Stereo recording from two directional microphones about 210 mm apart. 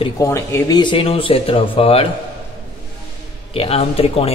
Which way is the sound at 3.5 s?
25° left (ahead or behind).